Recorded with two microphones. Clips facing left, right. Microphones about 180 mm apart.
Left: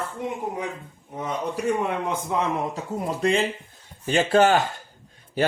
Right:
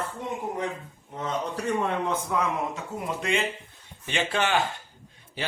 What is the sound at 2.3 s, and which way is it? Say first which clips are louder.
Speech: left 3 dB; 20° left (ahead or behind).